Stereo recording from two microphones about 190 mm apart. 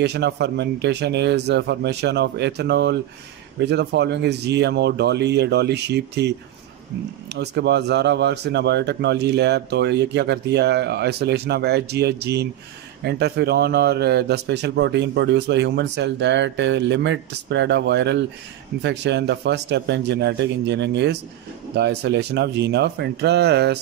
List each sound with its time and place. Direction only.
0.0 s a man's voice: 60° right (ahead or behind)
7.3 s a man's voice: 60° right (ahead or behind)